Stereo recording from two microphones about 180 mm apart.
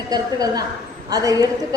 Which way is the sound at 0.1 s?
20° right (ahead or behind).